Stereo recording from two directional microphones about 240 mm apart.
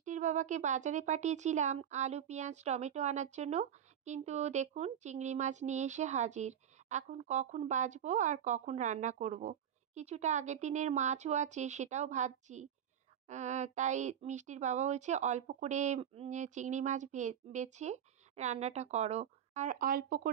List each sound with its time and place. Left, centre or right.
0.0 s speech: right